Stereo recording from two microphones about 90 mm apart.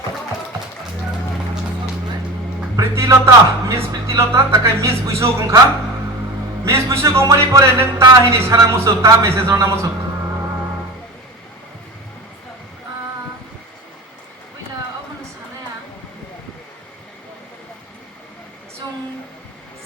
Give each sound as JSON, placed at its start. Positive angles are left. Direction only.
{"t": 2.7, "sound": "speech", "side_deg": -35}
{"t": 6.7, "sound": "speech", "side_deg": -30}